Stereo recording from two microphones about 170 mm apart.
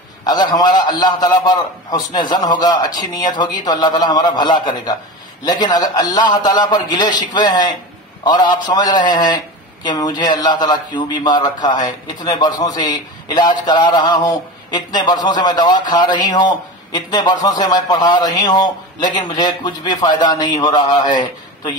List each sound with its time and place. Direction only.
0.2 s speech: 25° left (ahead or behind)